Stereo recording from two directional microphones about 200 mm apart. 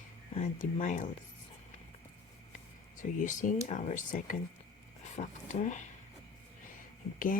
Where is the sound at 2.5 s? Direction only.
40° left (ahead or behind).